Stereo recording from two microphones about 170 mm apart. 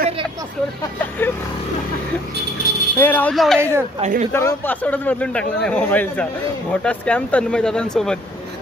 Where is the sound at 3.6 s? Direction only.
15° right (ahead or behind).